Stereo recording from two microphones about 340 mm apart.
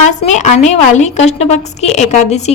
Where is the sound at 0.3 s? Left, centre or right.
Centre.